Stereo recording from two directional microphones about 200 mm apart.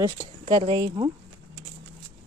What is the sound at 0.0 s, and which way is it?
Speech, 20° right (ahead or behind).